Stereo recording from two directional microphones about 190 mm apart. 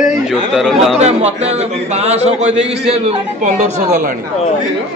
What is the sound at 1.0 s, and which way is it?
A man's voice, 35° right (ahead or behind).